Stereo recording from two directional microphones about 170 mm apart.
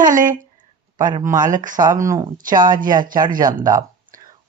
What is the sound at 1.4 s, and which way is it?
Speech, 50° right (ahead or behind).